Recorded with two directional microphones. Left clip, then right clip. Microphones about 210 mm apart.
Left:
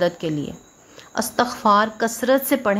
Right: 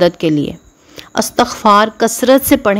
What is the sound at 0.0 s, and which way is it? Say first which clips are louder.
A woman's voice: right 10 dB; 30° right (ahead or behind).